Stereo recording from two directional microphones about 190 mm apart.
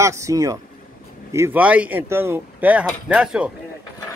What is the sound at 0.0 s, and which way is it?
Speech, 15° right (ahead or behind).